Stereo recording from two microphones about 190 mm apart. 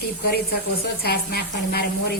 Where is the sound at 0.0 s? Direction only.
55° left (ahead or behind).